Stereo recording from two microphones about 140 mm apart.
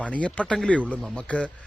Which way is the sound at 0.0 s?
10° left (ahead or behind).